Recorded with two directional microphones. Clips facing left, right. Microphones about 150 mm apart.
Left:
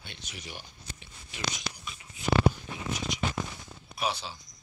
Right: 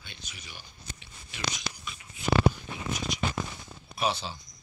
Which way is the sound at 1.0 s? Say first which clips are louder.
Even; 50° left (ahead or behind).